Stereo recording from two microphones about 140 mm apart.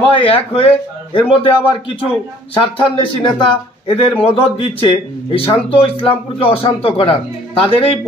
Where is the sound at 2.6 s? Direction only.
35° left (ahead or behind).